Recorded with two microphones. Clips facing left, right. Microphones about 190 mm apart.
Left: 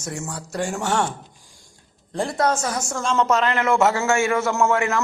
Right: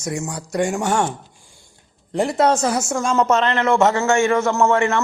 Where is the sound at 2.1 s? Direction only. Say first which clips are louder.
Right 4 dB; 20° right (ahead or behind).